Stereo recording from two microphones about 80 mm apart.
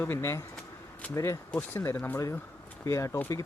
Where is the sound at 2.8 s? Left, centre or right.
Left.